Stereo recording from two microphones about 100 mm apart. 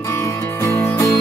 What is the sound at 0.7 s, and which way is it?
Music, 30° left (ahead or behind).